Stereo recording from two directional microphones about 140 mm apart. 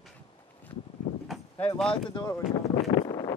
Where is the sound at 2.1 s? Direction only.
30° left (ahead or behind).